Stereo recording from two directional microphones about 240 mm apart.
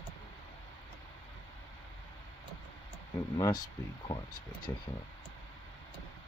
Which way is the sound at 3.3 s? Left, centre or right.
Centre.